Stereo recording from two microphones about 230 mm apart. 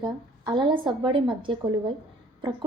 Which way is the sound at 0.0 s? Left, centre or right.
Centre.